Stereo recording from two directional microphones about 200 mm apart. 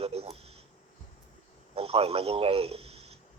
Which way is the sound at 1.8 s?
30° right (ahead or behind).